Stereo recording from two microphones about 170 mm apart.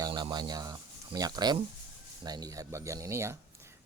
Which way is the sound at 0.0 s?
25° right (ahead or behind).